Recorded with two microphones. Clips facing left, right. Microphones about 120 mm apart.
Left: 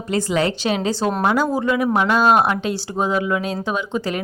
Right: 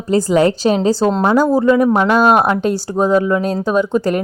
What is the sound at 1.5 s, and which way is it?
A woman's voice, 40° right (ahead or behind).